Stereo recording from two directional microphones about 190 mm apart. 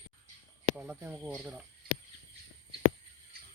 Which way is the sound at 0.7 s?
5° right (ahead or behind).